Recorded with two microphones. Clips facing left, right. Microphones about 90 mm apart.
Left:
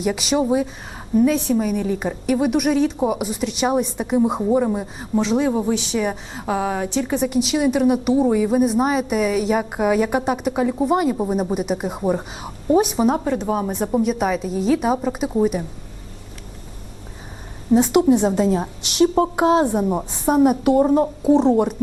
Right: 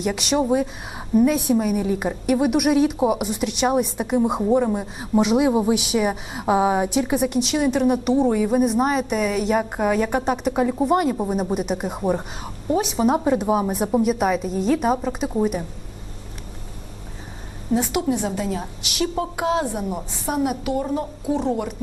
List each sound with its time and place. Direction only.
0.0 s a woman's voice: centre (ahead or behind)
5.1 s a woman's voice: 10° right (ahead or behind)
7.0 s a woman's voice: 5° right (ahead or behind)
13.2 s a woman's voice: 10° right (ahead or behind)
17.7 s a woman's voice: 25° left (ahead or behind)